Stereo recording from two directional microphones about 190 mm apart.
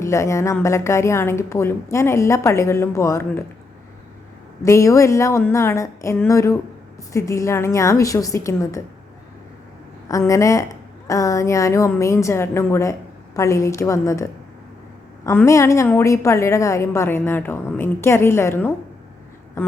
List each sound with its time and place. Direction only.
0.0 s a woman's voice: 15° left (ahead or behind)
4.6 s a woman's voice: 15° left (ahead or behind)
10.1 s a woman's voice: 15° left (ahead or behind)